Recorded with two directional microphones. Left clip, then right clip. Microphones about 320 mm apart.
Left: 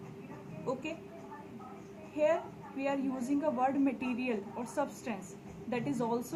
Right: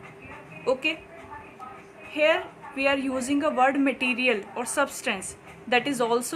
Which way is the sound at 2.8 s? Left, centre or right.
Right.